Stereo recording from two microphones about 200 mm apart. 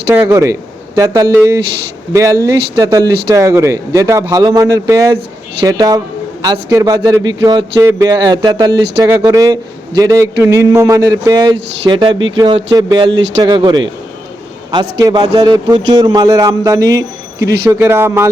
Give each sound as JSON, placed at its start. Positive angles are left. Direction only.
{"t": 0.1, "sound": "a man's voice", "side_deg": -10}